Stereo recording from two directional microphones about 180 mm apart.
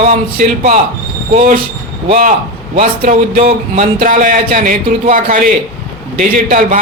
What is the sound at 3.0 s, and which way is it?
A man's voice, 50° right (ahead or behind).